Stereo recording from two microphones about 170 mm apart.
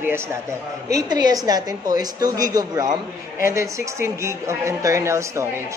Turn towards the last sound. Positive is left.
turn(degrees=-15)  # may be behind; listen again after turning